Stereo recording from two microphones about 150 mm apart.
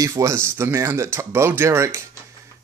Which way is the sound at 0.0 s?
20° right (ahead or behind).